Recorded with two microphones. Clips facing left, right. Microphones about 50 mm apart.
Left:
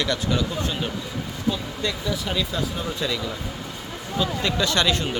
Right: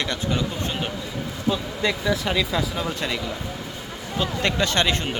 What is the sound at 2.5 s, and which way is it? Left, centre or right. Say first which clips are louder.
Speech: right 2 dB; right.